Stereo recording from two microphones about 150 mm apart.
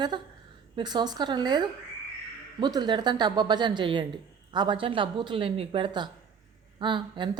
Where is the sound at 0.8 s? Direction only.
30° right (ahead or behind).